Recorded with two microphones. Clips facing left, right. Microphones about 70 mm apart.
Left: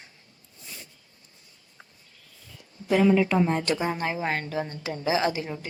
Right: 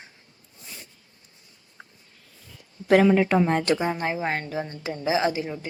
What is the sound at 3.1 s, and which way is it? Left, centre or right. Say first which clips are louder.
Speech: right 2 dB; right.